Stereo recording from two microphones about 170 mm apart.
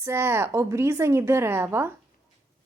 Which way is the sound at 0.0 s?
15° right (ahead or behind).